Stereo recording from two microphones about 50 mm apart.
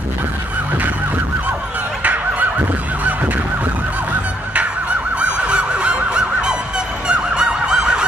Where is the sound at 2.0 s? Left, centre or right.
Right.